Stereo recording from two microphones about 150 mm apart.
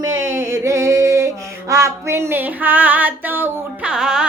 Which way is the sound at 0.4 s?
20° right (ahead or behind).